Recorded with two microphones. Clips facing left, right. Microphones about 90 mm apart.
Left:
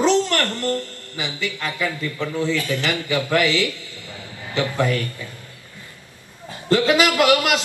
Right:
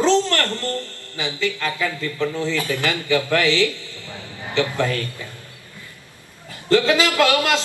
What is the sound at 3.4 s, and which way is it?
Speech, 25° right (ahead or behind).